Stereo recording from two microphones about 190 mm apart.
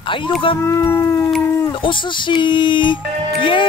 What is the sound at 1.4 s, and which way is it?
Dog, 15° left (ahead or behind).